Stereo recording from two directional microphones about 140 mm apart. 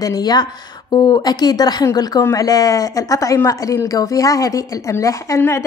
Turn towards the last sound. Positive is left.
turn(degrees=20)  # may be behind; listen again after turning